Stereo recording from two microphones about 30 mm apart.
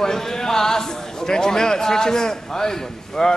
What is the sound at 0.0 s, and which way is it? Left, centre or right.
A man's voice, centre.